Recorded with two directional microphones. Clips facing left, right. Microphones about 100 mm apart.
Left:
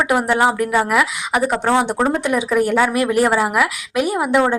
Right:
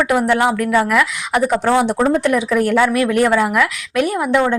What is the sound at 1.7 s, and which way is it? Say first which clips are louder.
Speech: right 2 dB; centre (ahead or behind).